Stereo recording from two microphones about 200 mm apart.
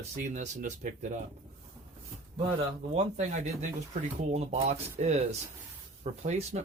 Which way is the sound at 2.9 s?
35° right (ahead or behind).